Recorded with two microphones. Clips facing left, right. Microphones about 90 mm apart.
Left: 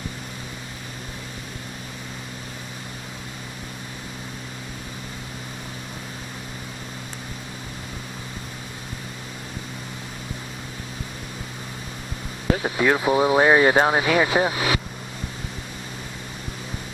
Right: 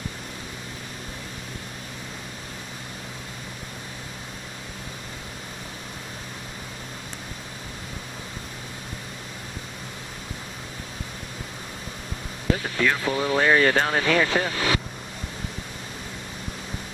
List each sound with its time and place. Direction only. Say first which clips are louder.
12.6 s speech: left 7 dB; 20° left (ahead or behind)